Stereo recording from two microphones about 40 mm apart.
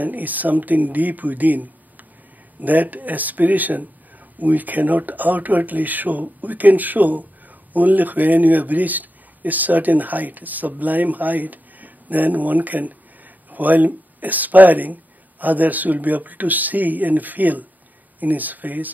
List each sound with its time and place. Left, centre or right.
0.0 s speech: right